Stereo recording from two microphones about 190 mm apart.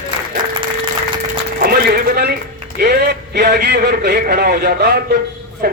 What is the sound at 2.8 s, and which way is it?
A man's voice, 60° right (ahead or behind).